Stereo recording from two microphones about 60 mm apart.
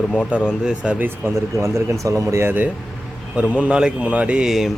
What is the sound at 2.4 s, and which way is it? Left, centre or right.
Speech, right.